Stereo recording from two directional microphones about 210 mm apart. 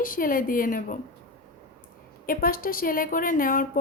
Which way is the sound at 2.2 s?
45° left (ahead or behind).